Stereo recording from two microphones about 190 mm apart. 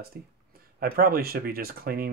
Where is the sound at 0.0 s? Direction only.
55° right (ahead or behind).